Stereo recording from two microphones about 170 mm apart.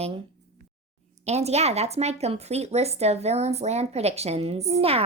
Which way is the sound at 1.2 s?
40° right (ahead or behind).